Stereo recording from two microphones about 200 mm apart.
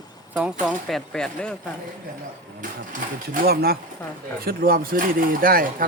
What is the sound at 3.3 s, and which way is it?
Speech, 50° right (ahead or behind).